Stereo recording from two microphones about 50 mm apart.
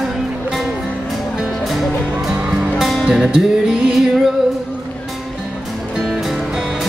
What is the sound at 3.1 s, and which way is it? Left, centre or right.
Music, centre.